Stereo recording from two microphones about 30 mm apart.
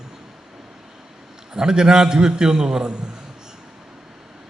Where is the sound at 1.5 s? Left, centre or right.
Right.